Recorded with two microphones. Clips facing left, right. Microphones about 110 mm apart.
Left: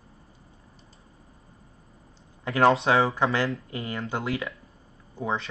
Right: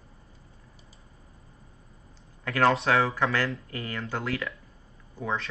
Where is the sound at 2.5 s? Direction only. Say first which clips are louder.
Left 3 dB; 20° left (ahead or behind).